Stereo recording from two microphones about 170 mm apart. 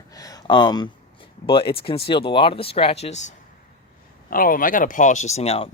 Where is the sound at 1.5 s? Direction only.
30° left (ahead or behind).